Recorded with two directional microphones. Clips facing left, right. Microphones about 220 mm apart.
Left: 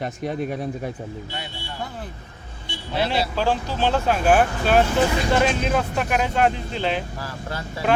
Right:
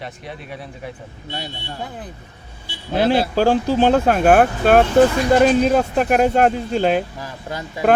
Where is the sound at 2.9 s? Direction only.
50° right (ahead or behind).